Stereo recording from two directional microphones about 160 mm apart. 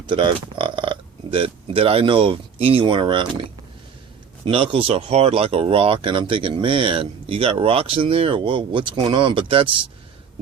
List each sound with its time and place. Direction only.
0.1 s speech: 30° right (ahead or behind)
4.4 s speech: 35° right (ahead or behind)